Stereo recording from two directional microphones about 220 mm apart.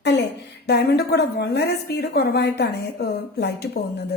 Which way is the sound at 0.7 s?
50° left (ahead or behind).